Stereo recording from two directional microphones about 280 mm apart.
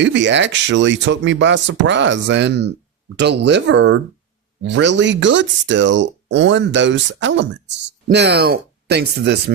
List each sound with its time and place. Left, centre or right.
0.0 s speech: right